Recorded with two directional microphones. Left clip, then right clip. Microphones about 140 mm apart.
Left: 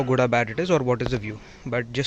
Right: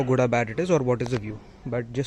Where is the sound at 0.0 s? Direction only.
10° right (ahead or behind).